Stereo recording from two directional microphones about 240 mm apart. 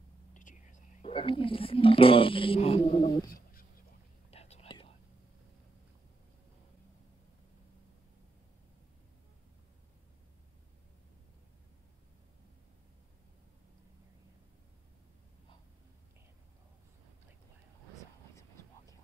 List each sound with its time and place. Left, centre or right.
0.3 s speech: left
4.3 s whispering: left